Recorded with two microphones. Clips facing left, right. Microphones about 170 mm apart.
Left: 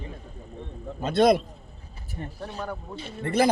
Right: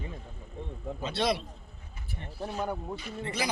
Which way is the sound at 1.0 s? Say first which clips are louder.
Left 10 dB; 50° left (ahead or behind).